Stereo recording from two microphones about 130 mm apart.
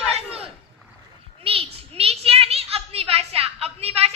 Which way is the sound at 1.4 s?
45° right (ahead or behind).